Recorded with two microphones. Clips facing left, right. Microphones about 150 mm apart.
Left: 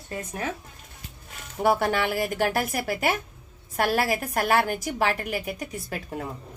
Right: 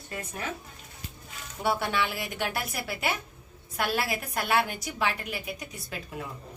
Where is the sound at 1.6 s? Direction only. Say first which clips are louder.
Left 5 dB; 45° left (ahead or behind).